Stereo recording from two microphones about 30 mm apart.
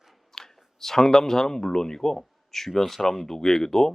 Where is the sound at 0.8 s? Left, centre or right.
Centre.